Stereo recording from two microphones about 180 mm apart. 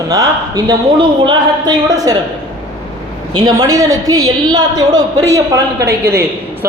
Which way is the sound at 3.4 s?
20° right (ahead or behind).